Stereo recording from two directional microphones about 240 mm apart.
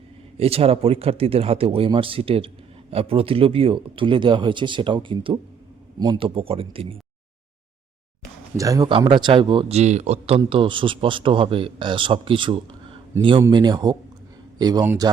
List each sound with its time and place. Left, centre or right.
0.3 s speech: right
8.5 s speech: centre